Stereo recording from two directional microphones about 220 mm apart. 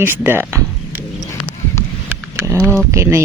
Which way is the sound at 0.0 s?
10° right (ahead or behind).